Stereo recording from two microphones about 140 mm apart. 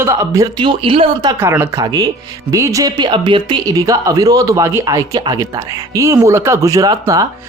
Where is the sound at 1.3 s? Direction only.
20° right (ahead or behind).